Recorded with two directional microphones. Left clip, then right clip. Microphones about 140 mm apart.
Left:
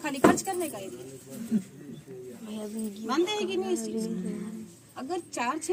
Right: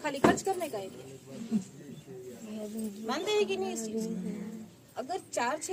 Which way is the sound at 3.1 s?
50° right (ahead or behind).